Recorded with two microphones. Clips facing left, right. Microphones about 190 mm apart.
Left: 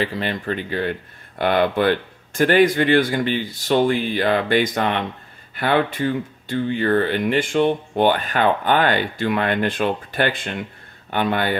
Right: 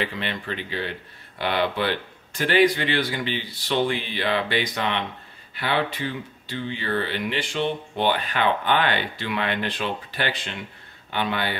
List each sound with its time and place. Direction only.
0.0 s speech: 40° left (ahead or behind)